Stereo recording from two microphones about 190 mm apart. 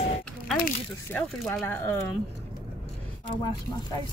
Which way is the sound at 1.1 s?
10° left (ahead or behind).